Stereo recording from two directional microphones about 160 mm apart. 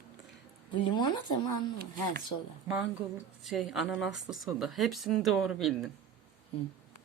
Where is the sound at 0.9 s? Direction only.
25° left (ahead or behind).